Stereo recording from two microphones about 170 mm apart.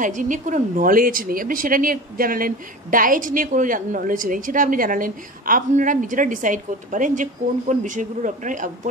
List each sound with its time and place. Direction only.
0.0 s a woman's voice: 50° right (ahead or behind)